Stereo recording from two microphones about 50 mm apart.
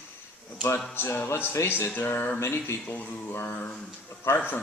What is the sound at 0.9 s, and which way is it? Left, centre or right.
A man's voice, left.